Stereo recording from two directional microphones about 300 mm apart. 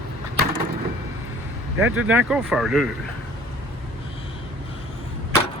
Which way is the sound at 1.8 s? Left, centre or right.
Centre.